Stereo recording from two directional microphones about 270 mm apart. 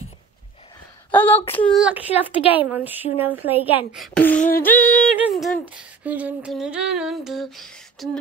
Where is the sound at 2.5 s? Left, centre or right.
Centre.